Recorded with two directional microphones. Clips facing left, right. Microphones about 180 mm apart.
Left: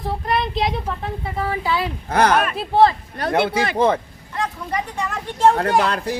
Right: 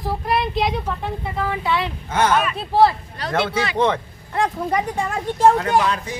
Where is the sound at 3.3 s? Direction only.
15° left (ahead or behind).